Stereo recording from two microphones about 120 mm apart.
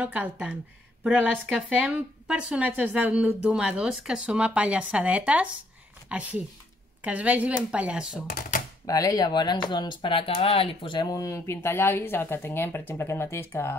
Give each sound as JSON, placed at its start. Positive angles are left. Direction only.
{"t": 0.0, "sound": "speech", "side_deg": -10}
{"t": 8.8, "sound": "speech", "side_deg": 30}